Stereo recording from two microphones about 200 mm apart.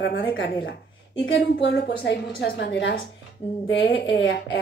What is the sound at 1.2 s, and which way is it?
A woman's voice, 60° left (ahead or behind).